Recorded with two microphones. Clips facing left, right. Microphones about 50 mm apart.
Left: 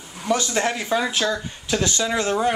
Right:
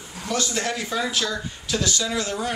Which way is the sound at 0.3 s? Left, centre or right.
Left.